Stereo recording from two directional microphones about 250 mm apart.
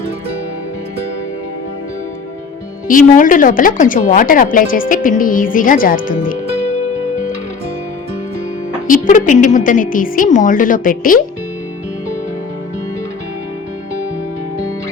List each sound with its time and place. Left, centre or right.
2.8 s a woman's voice: left
8.9 s a woman's voice: left